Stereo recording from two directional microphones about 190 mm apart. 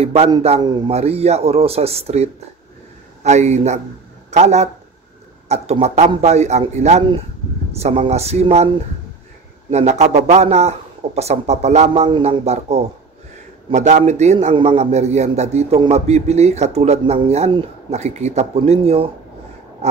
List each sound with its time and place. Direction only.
0.0 s a man's voice: 35° right (ahead or behind)
9.7 s a man's voice: 35° right (ahead or behind)
19.8 s pig: 35° right (ahead or behind)